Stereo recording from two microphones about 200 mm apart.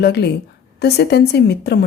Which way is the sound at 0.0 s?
55° left (ahead or behind).